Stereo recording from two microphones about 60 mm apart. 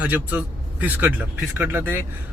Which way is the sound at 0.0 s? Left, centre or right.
Right.